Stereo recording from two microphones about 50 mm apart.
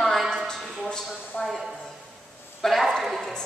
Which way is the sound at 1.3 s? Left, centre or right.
Left.